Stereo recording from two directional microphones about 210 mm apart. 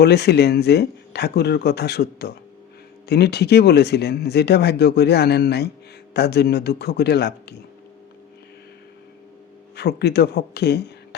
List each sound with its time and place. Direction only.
0.0 s speech: 50° left (ahead or behind)
9.7 s speech: 50° left (ahead or behind)